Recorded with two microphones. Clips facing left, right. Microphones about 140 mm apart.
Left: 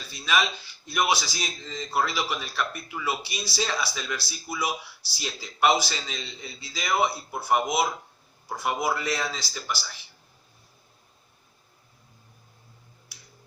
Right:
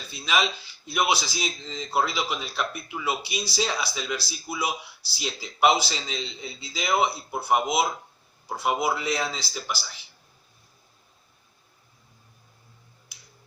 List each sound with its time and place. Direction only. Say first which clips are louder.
0.2 s a man's voice: even; 15° right (ahead or behind)